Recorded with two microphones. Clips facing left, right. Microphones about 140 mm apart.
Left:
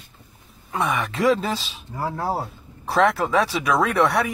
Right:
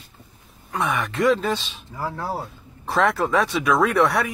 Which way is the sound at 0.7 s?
Centre (ahead or behind).